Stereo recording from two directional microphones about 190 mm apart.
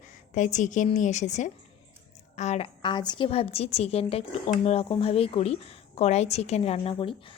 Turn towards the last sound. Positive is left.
turn(degrees=30)  # may be behind; listen again after turning